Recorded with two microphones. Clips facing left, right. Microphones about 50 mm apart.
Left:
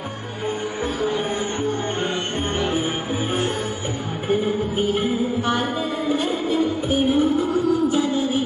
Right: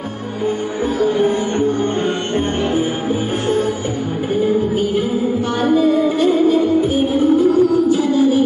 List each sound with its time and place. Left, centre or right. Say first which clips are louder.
6.5 s music: right 6 dB; left